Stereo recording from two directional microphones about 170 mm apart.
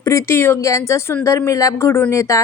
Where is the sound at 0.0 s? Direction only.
15° left (ahead or behind).